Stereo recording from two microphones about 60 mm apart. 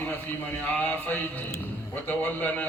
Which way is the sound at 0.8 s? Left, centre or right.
Left.